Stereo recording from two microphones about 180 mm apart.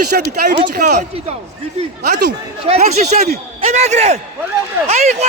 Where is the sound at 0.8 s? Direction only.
45° right (ahead or behind).